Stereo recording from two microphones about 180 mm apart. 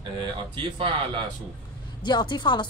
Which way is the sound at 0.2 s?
30° right (ahead or behind).